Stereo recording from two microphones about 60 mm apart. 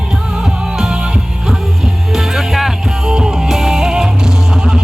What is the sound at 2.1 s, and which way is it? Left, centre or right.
Music, centre.